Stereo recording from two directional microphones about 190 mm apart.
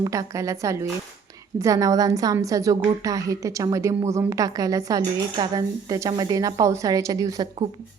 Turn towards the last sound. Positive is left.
turn(degrees=-20)  # may be behind; listen again after turning